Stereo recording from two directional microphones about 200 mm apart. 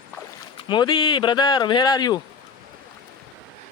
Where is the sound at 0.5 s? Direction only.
25° left (ahead or behind).